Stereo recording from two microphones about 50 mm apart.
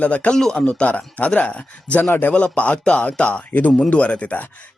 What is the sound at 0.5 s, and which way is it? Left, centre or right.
Speech, left.